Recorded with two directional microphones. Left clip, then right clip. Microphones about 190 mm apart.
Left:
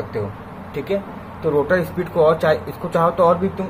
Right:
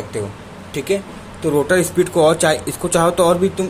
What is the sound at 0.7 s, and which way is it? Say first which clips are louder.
Speech: right 3 dB; 45° right (ahead or behind).